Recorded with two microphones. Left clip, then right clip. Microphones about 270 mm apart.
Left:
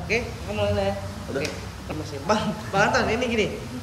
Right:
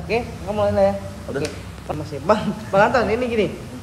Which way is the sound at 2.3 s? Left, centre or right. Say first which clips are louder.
Right 5 dB; centre.